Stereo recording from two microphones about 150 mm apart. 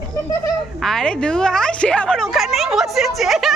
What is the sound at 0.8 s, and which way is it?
A woman's voice, 5° left (ahead or behind).